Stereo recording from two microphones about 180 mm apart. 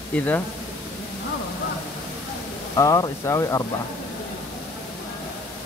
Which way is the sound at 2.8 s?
20° left (ahead or behind).